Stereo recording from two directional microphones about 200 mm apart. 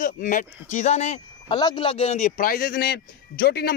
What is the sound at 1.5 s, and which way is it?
Speech, 20° left (ahead or behind).